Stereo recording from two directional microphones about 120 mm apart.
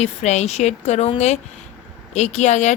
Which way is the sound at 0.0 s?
70° left (ahead or behind).